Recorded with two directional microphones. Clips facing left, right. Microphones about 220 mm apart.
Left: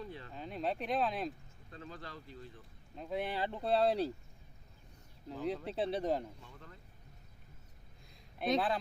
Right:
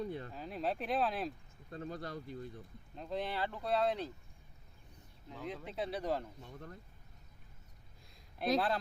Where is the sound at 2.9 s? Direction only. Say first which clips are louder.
Left 1 dB; 5° left (ahead or behind); by 4.1 s 35° left (ahead or behind).